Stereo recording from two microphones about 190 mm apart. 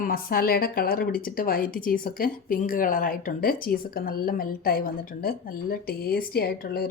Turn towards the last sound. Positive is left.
turn(degrees=55)  # may be behind; listen again after turning